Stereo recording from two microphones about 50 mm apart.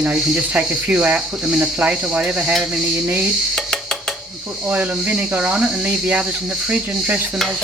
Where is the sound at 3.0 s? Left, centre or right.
Right.